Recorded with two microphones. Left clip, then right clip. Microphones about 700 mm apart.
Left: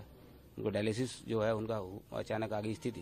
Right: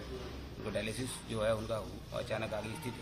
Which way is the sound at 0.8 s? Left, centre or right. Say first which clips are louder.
Left 1 dB; left.